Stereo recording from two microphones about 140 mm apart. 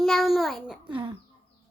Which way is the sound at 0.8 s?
35° right (ahead or behind).